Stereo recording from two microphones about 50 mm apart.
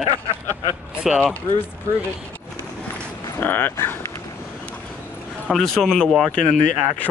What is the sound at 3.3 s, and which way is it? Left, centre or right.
Speech, left.